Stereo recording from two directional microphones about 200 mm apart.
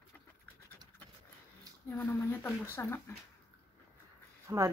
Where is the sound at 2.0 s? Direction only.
10° left (ahead or behind).